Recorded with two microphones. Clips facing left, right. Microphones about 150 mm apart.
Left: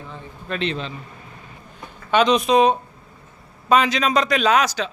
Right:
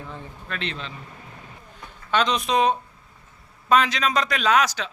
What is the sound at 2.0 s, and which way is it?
A man's voice, 10° left (ahead or behind).